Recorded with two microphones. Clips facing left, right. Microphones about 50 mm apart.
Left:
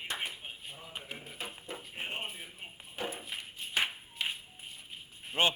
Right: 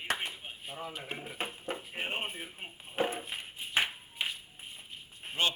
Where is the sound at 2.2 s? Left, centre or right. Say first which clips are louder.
Right 3 dB; right.